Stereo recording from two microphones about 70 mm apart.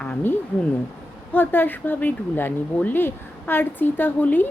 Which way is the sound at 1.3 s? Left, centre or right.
Left.